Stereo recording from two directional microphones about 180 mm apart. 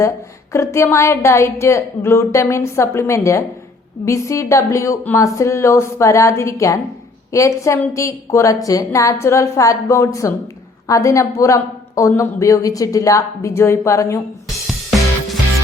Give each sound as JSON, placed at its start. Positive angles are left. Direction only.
{"t": 0.5, "sound": "a woman's voice", "side_deg": 15}
{"t": 14.7, "sound": "music", "side_deg": 0}